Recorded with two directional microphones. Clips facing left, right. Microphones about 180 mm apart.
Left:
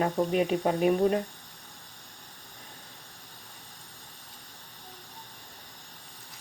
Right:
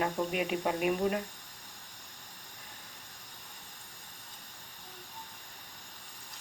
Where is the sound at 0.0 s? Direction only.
35° left (ahead or behind).